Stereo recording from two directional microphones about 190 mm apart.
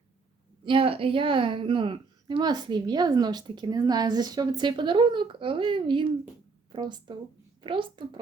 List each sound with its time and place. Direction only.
0.6 s a woman's voice: 25° right (ahead or behind)